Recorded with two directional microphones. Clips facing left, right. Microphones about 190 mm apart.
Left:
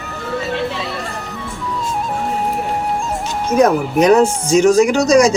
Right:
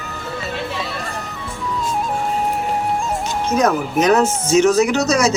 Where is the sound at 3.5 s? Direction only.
30° left (ahead or behind).